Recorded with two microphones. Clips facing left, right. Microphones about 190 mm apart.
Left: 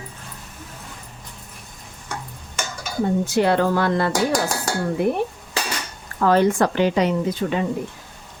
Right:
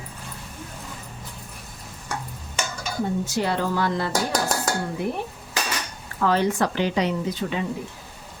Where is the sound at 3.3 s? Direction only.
60° left (ahead or behind).